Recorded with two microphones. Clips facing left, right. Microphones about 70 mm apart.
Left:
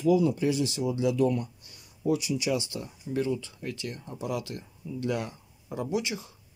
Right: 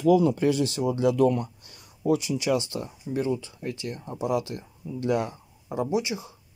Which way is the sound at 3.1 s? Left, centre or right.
Right.